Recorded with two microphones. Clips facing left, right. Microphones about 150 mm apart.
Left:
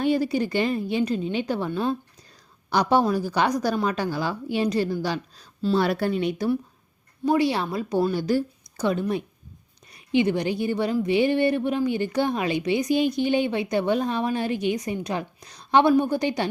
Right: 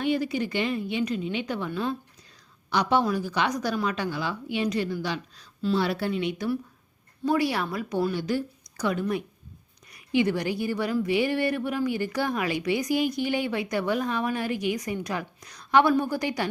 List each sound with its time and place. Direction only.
0.0 s speech: 35° left (ahead or behind)
7.3 s a woman's voice: 25° left (ahead or behind)